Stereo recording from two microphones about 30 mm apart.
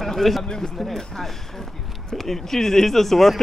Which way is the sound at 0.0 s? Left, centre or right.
Centre.